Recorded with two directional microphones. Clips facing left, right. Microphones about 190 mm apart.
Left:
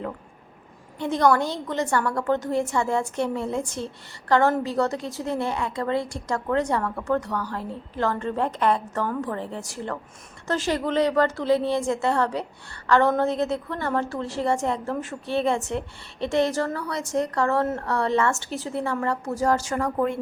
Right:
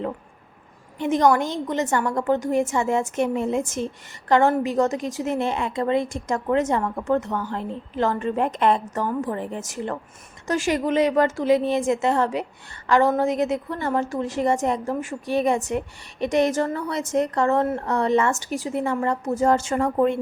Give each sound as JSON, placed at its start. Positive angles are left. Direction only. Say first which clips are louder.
{"t": 0.9, "sound": "a woman's voice", "louder": "right 2 dB", "side_deg": -15}